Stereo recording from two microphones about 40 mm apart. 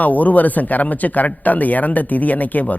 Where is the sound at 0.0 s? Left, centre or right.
Left.